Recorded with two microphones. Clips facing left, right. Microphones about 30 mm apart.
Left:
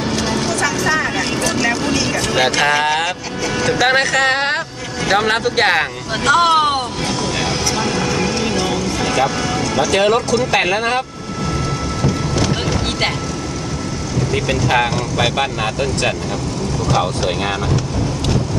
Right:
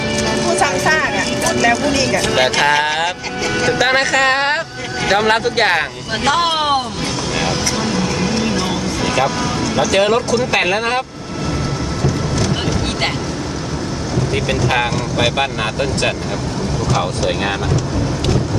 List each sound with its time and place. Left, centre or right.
0.9 s vehicle: centre
1.5 s vehicle: centre
1.9 s speech: centre
2.3 s speech: centre
6.2 s speech: centre
8.0 s vehicle: centre
9.9 s speech: centre
12.0 s thunder: centre
14.3 s speech: centre